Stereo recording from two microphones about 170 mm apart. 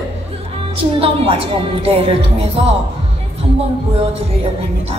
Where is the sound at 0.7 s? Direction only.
35° right (ahead or behind).